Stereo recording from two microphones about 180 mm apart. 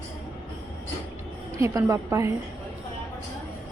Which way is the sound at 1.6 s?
15° right (ahead or behind).